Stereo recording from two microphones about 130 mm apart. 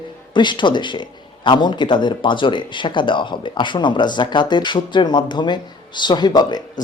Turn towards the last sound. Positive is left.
turn(degrees=35)  # may be behind; listen again after turning